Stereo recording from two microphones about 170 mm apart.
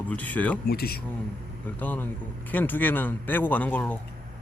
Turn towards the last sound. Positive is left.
turn(degrees=10)  # may be behind; listen again after turning